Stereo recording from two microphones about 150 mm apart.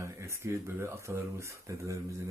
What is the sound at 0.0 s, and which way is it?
Speech, 20° right (ahead or behind).